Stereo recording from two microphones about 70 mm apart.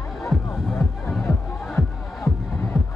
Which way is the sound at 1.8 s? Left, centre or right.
Left.